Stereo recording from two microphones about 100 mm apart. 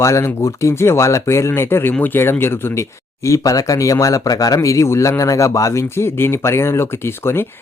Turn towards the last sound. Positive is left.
turn(degrees=25)  # may be behind; listen again after turning